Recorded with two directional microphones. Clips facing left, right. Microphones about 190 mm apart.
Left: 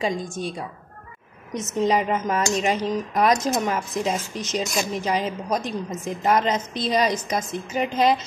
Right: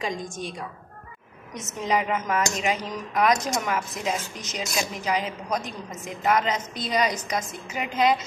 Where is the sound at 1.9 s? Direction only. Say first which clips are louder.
Left 1 dB; 35° left (ahead or behind).